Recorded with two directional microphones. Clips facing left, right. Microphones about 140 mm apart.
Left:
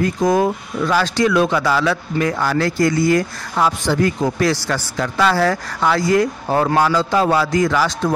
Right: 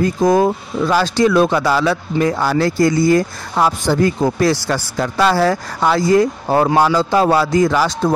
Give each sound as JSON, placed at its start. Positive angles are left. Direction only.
{"t": 0.0, "sound": "a man's voice", "side_deg": -30}